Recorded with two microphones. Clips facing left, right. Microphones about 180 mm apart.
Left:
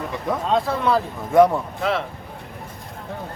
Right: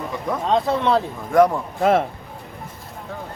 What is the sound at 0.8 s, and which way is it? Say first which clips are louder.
Speech: right 1 dB; centre (ahead or behind).